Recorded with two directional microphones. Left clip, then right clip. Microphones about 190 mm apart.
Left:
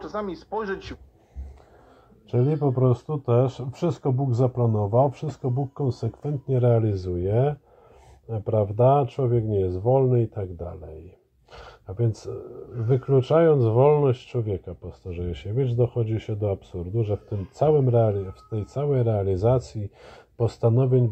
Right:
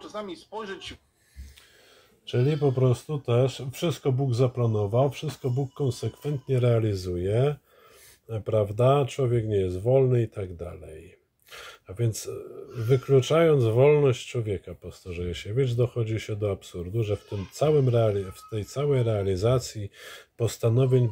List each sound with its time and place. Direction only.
0.0 s speech: 15° left (ahead or behind)
2.2 s speech: 20° right (ahead or behind)